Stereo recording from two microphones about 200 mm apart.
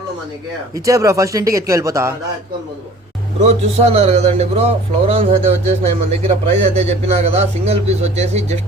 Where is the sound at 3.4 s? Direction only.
30° right (ahead or behind).